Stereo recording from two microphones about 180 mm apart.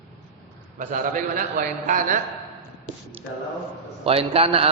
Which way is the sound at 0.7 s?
45° right (ahead or behind).